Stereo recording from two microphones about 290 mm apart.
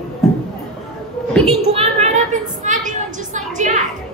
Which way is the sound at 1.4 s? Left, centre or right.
Right.